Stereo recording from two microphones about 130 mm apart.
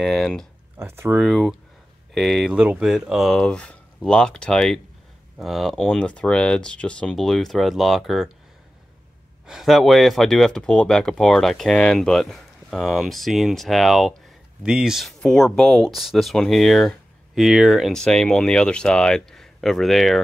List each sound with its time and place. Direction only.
0.0 s speech: centre (ahead or behind)
0.7 s speech: 20° right (ahead or behind)
1.1 s speech: centre (ahead or behind)
9.5 s speech: centre (ahead or behind)